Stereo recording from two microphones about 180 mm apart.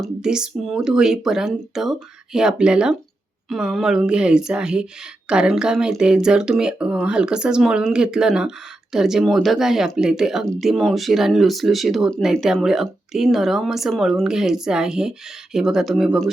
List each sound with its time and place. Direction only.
0.0 s speech: 5° right (ahead or behind)